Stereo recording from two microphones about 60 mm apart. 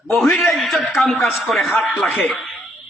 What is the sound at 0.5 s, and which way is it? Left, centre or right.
A man's voice, centre.